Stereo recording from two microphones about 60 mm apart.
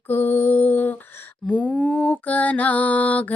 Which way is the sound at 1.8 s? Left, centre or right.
Centre.